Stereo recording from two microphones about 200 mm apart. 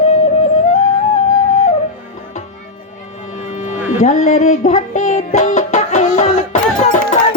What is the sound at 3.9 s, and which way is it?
Music, 40° left (ahead or behind).